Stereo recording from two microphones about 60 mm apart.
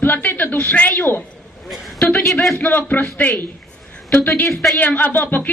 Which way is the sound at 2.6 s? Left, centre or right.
Left.